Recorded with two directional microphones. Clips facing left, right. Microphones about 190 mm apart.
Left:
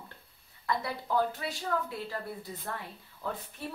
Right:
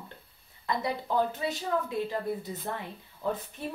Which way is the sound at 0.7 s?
20° right (ahead or behind).